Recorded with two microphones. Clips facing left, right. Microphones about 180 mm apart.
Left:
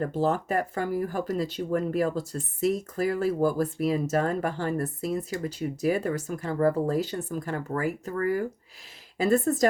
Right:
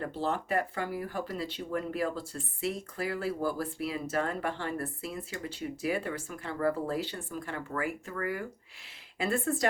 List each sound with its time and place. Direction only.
0.0 s speech: 45° left (ahead or behind)